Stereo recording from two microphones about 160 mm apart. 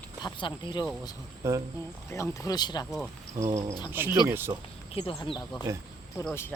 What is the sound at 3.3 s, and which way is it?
Speech, 20° right (ahead or behind).